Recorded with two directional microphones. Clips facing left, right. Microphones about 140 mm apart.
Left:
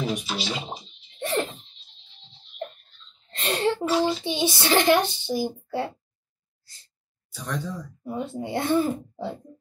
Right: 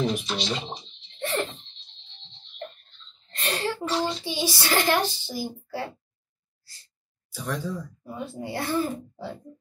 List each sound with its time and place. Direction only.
0.0 s music: 5° left (ahead or behind)
3.3 s a sound: 25° left (ahead or behind)
3.8 s speech: 5° left (ahead or behind)
4.2 s a child's voice: 20° left (ahead or behind)
7.3 s speech: 5° right (ahead or behind)
8.1 s a child's voice: 20° left (ahead or behind)